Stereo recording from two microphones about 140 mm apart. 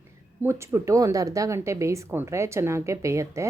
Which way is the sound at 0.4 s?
20° right (ahead or behind).